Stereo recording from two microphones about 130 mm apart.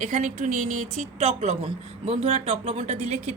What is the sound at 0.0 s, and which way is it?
A woman's voice, 70° right (ahead or behind).